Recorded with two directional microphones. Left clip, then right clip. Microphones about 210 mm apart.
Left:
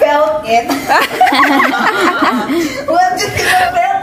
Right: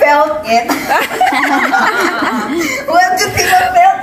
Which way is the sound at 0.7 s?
5° left (ahead or behind).